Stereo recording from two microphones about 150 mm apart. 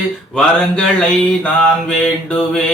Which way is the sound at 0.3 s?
5° left (ahead or behind).